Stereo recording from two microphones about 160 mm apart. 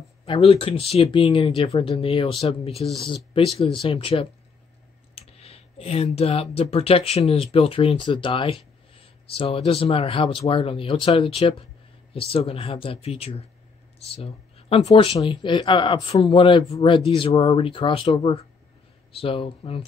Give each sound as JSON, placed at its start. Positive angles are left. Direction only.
{"t": 0.2, "sound": "speech", "side_deg": 35}